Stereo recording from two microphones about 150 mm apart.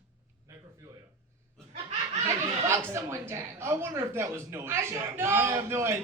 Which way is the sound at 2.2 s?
20° right (ahead or behind).